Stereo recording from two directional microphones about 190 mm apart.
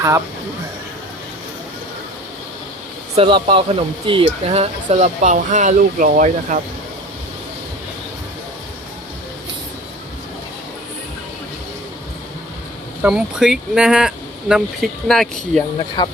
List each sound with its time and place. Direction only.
3.2 s speech: 25° right (ahead or behind); by 6.6 s 45° right (ahead or behind)
13.0 s speech: 5° right (ahead or behind)
16.0 s speech: 20° left (ahead or behind)